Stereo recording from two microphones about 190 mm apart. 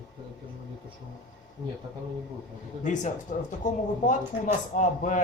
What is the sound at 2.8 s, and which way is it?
A man's voice, 40° left (ahead or behind).